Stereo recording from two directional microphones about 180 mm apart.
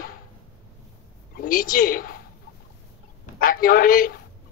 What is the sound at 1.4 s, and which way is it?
Speech, 50° left (ahead or behind).